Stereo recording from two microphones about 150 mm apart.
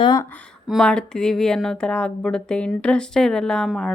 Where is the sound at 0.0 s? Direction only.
25° left (ahead or behind).